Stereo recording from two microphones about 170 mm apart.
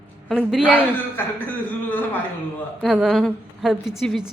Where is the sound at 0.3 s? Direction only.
5° right (ahead or behind).